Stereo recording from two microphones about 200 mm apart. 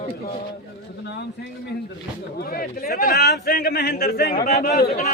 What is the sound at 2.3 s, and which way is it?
A man's voice, 50° left (ahead or behind).